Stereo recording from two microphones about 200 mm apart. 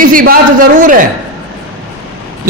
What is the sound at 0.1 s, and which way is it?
Speech, 45° right (ahead or behind).